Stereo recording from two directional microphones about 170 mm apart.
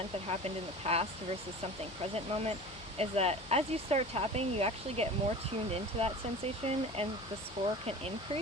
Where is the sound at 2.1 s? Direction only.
40° right (ahead or behind).